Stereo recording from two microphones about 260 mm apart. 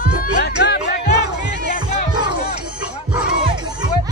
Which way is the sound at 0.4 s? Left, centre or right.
Left.